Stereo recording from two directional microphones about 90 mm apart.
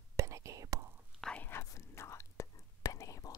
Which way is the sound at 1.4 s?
25° left (ahead or behind).